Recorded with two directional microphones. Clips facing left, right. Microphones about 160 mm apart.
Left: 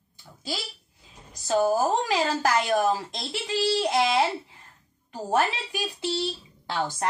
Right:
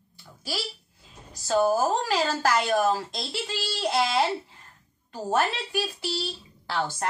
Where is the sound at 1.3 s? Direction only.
20° left (ahead or behind).